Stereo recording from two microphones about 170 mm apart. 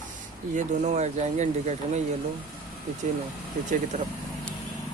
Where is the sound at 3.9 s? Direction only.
50° right (ahead or behind).